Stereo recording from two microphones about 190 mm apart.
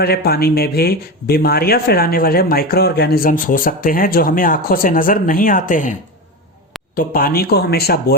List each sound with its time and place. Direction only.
0.0 s speech: 55° left (ahead or behind)
6.9 s speech: 50° left (ahead or behind)